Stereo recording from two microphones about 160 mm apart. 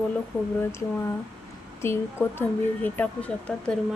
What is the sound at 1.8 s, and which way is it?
Speech, 15° left (ahead or behind).